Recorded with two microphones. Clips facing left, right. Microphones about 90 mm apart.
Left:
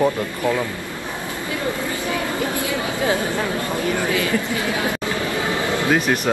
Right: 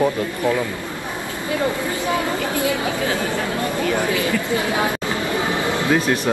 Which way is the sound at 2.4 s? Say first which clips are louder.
Right 2 dB; 20° left (ahead or behind).